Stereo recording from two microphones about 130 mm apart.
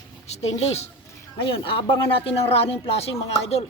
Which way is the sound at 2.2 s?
45° left (ahead or behind).